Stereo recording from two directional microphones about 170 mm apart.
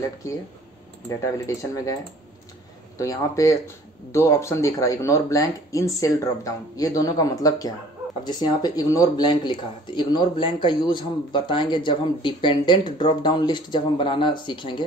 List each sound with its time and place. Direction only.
1.0 s speech: 20° left (ahead or behind)
3.0 s speech: 20° left (ahead or behind)